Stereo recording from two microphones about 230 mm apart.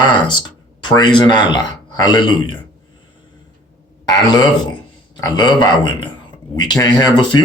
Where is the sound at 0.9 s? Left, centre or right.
Centre.